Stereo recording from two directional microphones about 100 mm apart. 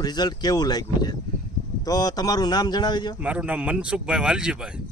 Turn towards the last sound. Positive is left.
turn(degrees=-10)  # may be behind; listen again after turning